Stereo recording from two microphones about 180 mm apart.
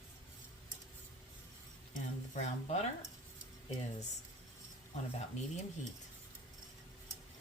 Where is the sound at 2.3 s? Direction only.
40° left (ahead or behind).